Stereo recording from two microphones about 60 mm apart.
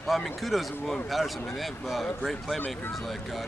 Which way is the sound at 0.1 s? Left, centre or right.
Centre.